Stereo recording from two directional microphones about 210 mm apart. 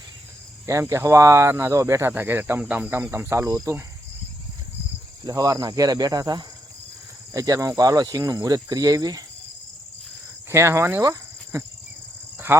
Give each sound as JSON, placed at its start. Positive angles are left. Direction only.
{"t": 0.7, "sound": "speech", "side_deg": -15}
{"t": 5.2, "sound": "speech", "side_deg": -15}
{"t": 10.5, "sound": "cricket", "side_deg": -15}
{"t": 12.5, "sound": "speech", "side_deg": -10}